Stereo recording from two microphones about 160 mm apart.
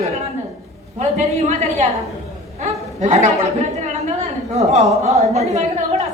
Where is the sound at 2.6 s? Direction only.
45° right (ahead or behind).